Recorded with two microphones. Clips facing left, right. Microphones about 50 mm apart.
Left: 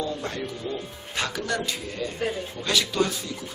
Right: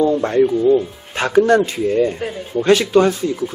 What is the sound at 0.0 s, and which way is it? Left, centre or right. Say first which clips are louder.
Speech: right 16 dB; right.